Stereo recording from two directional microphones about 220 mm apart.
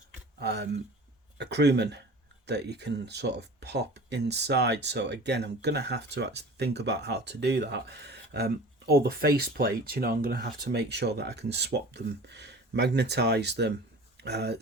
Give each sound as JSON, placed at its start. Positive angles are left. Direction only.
{"t": 0.3, "sound": "speech", "side_deg": -50}